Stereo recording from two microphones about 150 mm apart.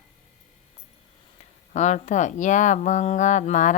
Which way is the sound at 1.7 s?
50° left (ahead or behind).